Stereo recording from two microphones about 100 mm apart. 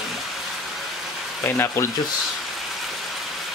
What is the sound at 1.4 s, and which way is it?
Speech, 25° left (ahead or behind).